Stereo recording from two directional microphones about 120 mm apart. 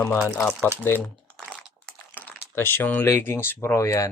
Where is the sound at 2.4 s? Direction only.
20° left (ahead or behind).